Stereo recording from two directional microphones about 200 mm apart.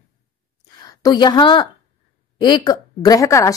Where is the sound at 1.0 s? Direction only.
20° left (ahead or behind).